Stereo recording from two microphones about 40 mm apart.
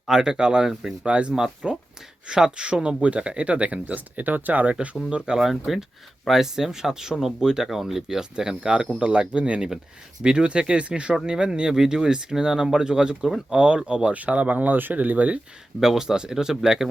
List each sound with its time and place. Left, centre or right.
0.2 s speech: centre
1.0 s speech: right
1.6 s speech: centre
2.2 s speech: right
5.2 s speech: centre; by 14.1 s right
14.1 s speech: right
15.8 s speech: centre